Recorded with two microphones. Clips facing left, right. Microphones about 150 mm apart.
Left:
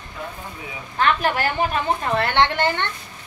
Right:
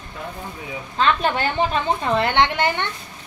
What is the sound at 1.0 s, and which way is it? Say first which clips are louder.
Speech: even; 25° right (ahead or behind).